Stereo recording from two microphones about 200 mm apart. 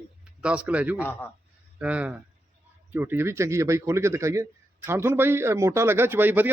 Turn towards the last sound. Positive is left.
turn(degrees=-10)  # may be behind; listen again after turning